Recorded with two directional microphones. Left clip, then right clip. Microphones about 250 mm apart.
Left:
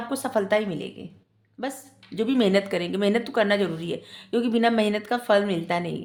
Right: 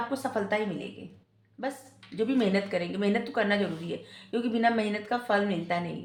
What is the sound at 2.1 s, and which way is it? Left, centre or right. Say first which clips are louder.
Speech: left 5 dB; left.